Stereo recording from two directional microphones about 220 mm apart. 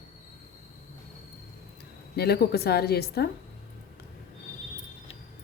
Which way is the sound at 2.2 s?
45° left (ahead or behind).